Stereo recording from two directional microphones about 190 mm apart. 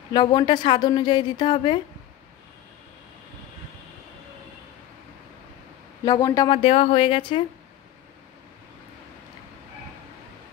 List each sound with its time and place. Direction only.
0.1 s a woman's voice: 20° left (ahead or behind)
6.0 s a woman's voice: 20° left (ahead or behind)